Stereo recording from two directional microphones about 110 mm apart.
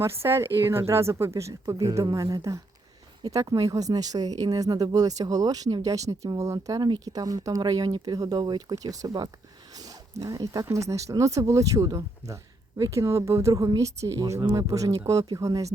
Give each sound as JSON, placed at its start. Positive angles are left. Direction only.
{"t": 0.0, "sound": "speech", "side_deg": -25}